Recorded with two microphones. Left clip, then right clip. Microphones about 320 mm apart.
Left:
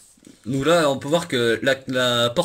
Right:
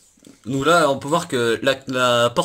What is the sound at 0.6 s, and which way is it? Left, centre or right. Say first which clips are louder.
Speech: right 2 dB; centre.